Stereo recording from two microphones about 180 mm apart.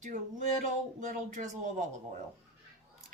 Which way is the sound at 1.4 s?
45° right (ahead or behind).